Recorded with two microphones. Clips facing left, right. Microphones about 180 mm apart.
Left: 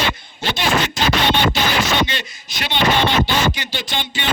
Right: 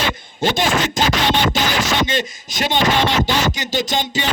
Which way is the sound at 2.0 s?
45° right (ahead or behind).